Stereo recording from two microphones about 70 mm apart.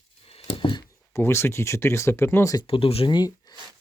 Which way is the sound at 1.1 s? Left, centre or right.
Left.